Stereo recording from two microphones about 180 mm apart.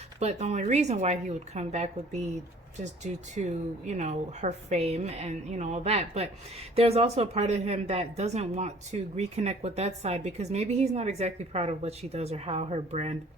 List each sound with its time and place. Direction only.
0.2 s speech: 40° right (ahead or behind)